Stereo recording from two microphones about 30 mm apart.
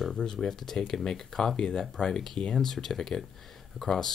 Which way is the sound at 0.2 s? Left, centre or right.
Left.